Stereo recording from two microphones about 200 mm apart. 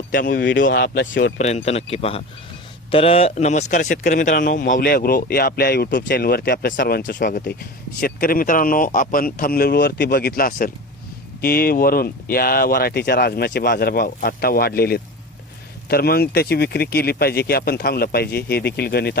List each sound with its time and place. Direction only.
0.1 s speech: 45° left (ahead or behind)
0.7 s speech: 60° left (ahead or behind)
1.4 s a man's voice: 35° left (ahead or behind); by 19.2 s 50° left (ahead or behind)